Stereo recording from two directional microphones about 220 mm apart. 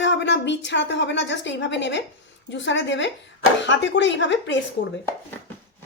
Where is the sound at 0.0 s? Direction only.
55° left (ahead or behind).